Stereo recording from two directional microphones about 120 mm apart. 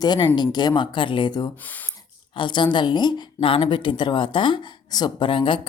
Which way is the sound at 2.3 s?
40° left (ahead or behind).